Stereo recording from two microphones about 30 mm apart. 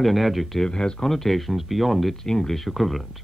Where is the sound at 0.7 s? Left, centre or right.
Left.